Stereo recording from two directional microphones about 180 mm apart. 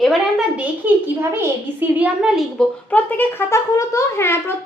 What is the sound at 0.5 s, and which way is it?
A child's voice, 10° right (ahead or behind).